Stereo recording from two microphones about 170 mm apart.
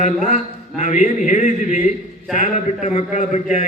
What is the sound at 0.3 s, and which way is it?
A man's voice, 45° left (ahead or behind).